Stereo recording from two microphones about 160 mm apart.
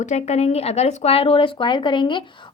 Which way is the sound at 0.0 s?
45° left (ahead or behind).